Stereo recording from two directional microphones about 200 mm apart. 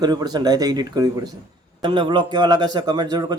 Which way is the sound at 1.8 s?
25° right (ahead or behind).